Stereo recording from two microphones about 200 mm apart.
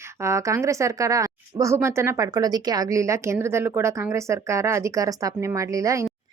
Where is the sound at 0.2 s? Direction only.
15° right (ahead or behind).